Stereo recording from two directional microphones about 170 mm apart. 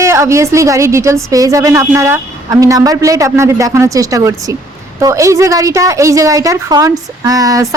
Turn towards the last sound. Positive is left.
turn(degrees=-20)  # may be behind; listen again after turning